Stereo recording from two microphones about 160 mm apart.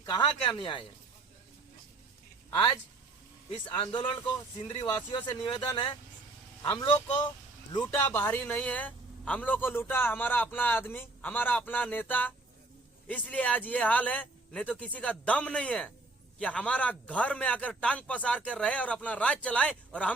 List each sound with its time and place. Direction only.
0.0 s speech: 30° left (ahead or behind)
2.5 s speech: 30° left (ahead or behind)
4.7 s speech: 30° left (ahead or behind)
7.9 s a man's voice: 10° left (ahead or behind)